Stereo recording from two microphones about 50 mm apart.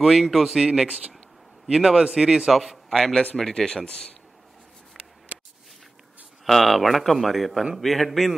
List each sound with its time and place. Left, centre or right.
0.0 s speech: centre
0.8 s speech: right
1.7 s a man's voice: centre
6.4 s speech: centre